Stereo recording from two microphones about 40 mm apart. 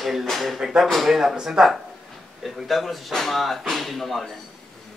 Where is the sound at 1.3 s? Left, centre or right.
Right.